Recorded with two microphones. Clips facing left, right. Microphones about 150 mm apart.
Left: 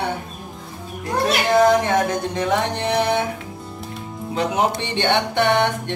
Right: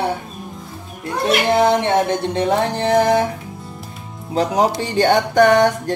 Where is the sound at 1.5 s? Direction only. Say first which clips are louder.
Left 3 dB; 30° right (ahead or behind).